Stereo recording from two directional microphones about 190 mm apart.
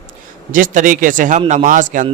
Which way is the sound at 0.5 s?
45° right (ahead or behind).